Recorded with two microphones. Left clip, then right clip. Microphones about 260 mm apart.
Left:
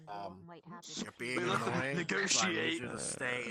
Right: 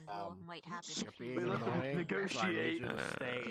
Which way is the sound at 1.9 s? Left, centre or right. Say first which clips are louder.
Left 5 dB; left.